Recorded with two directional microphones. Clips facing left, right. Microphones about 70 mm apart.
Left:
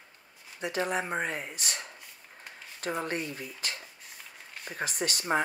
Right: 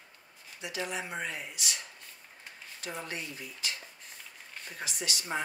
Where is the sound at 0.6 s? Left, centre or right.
Left.